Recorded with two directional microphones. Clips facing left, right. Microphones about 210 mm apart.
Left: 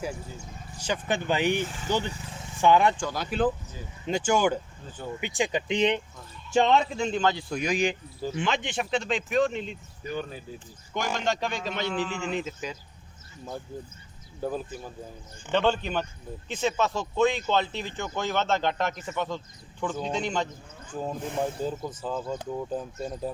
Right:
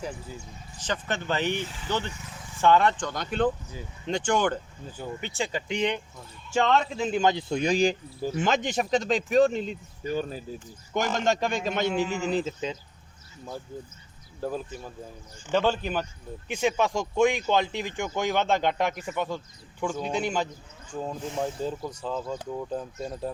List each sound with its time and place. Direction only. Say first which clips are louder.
0.8 s speech: left 2 dB; 10° left (ahead or behind)
1.5 s speech: left 3 dB; 50° left (ahead or behind)
2.0 s speech: left 3 dB; 30° left (ahead or behind)
2.6 s speech: even; 15° left (ahead or behind)
6.9 s a man's voice: right 2 dB; 5° right (ahead or behind); by 10.4 s 35° right (ahead or behind)
10.9 s speech: right 3 dB; 45° right (ahead or behind); by 12.7 s 25° right (ahead or behind)
14.4 s speech: even; centre (ahead or behind)
20.9 s speech: left 1 dB; 5° left (ahead or behind)